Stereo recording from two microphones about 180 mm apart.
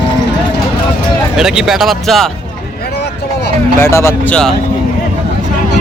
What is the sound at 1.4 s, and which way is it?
Speech, centre (ahead or behind).